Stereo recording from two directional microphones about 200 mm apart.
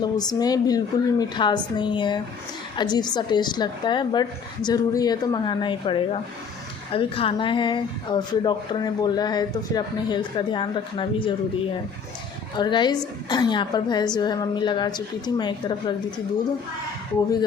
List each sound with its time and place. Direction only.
0.0 s speech: 20° left (ahead or behind)
12.5 s speech: 20° left (ahead or behind)